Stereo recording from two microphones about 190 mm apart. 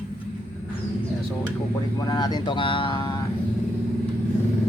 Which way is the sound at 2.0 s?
20° left (ahead or behind).